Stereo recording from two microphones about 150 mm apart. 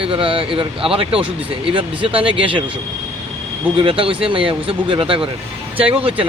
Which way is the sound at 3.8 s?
35° right (ahead or behind).